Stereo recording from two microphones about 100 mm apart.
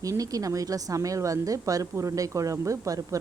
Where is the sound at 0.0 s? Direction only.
35° right (ahead or behind).